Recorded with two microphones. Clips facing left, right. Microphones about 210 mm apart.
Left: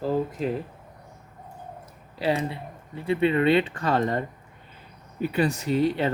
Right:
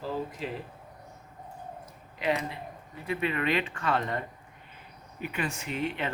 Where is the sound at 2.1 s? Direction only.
30° left (ahead or behind).